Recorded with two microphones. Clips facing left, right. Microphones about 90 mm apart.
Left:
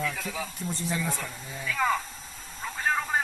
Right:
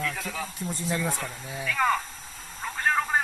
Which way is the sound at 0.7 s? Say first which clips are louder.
Right 2 dB; 10° right (ahead or behind).